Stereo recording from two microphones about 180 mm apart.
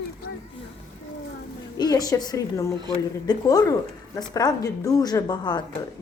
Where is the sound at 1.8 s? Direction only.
20° left (ahead or behind).